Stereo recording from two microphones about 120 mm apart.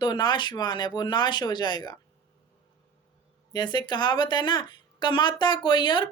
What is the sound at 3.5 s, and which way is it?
A woman's voice, 35° left (ahead or behind).